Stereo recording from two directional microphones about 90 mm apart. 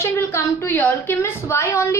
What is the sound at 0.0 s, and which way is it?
A woman's voice, 30° left (ahead or behind).